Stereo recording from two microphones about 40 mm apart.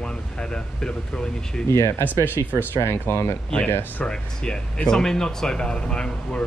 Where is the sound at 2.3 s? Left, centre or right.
Left.